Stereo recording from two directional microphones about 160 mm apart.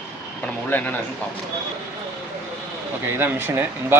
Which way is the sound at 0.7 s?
10° left (ahead or behind).